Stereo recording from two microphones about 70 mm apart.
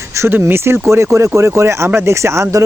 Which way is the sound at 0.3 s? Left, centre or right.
Right.